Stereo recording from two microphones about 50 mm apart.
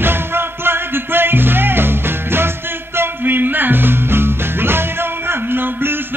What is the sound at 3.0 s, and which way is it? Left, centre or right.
Music, right.